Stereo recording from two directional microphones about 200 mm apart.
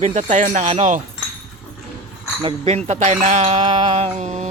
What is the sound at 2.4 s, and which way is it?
A man's voice, 25° right (ahead or behind).